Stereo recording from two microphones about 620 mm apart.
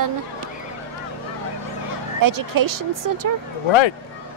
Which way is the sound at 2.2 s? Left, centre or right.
Right.